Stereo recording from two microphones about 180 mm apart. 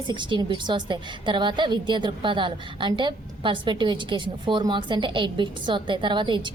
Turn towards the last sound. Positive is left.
turn(degrees=-25)  # may be behind; listen again after turning